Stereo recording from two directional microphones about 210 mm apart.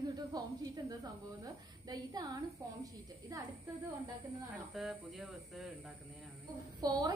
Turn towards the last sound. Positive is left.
turn(degrees=-20)  # may be behind; listen again after turning